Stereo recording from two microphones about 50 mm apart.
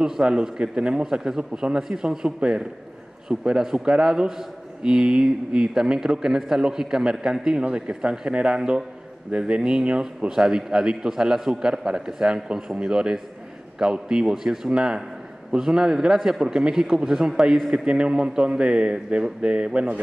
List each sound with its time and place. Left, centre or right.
0.0 s a man's voice: centre